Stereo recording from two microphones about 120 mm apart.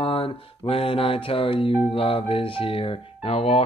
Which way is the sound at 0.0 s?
50° left (ahead or behind).